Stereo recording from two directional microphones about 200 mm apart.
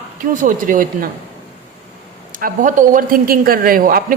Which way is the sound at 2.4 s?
40° right (ahead or behind).